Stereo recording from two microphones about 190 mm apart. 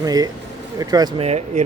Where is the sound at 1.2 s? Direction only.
35° right (ahead or behind).